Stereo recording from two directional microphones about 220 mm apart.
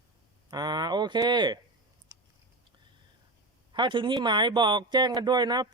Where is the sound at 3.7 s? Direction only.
20° right (ahead or behind).